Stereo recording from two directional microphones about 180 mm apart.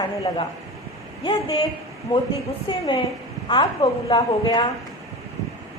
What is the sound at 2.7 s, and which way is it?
Speech, 25° left (ahead or behind).